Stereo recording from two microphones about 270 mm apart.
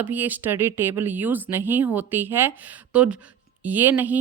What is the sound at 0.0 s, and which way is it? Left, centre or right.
A woman's voice, centre.